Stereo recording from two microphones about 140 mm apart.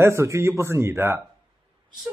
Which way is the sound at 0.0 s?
20° right (ahead or behind).